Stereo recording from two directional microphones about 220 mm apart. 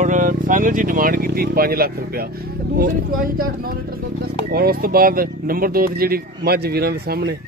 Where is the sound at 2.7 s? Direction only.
40° right (ahead or behind).